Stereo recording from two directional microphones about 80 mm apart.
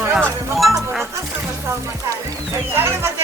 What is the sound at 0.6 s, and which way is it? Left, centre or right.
Music, centre.